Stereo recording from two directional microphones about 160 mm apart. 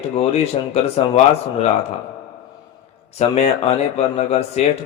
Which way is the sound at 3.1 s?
40° left (ahead or behind).